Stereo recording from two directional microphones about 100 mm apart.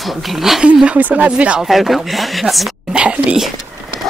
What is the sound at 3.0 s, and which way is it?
Whispering, 10° right (ahead or behind).